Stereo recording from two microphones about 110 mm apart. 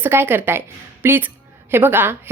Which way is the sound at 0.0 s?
20° right (ahead or behind).